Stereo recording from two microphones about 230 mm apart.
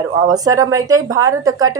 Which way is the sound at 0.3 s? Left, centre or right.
Centre.